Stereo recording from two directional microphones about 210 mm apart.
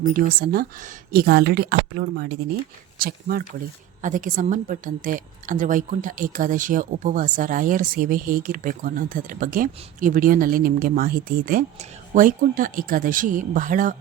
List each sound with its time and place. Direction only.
0.0 s a woman's voice: 40° right (ahead or behind)